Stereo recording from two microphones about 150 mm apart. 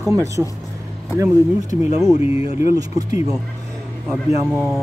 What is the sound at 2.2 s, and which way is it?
Speech, 40° left (ahead or behind).